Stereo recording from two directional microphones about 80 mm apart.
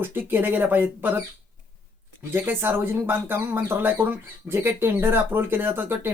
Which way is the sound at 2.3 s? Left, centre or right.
Right.